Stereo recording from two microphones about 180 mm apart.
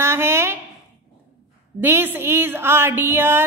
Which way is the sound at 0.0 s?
15° right (ahead or behind).